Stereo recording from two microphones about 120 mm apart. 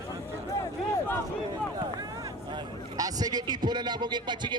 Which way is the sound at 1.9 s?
30° right (ahead or behind).